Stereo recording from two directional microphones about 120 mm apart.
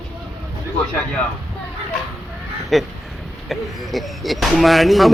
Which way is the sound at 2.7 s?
Centre (ahead or behind).